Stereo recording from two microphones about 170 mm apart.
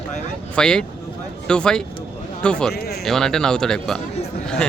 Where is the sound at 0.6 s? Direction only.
5° left (ahead or behind).